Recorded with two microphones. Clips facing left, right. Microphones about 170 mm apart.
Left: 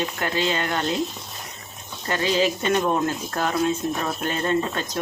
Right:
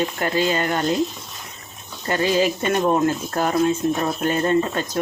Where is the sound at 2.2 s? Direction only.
50° right (ahead or behind).